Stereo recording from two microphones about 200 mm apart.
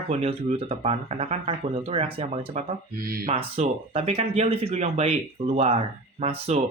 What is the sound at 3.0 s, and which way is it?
Speech, 45° right (ahead or behind).